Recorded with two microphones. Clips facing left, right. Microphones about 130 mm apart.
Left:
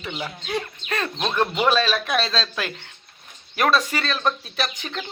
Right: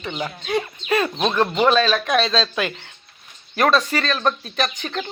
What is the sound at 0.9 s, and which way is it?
Speech, 10° right (ahead or behind).